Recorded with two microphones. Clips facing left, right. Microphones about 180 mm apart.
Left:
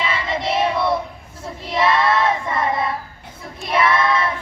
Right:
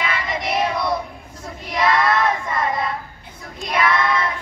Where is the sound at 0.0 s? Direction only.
25° left (ahead or behind).